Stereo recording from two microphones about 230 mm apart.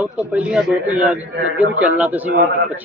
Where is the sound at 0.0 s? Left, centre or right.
Centre.